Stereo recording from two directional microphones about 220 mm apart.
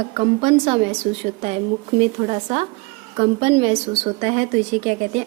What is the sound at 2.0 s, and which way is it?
A woman's voice, 30° right (ahead or behind).